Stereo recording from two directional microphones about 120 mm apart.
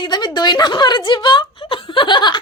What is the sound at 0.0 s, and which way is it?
A woman's voice, 35° left (ahead or behind).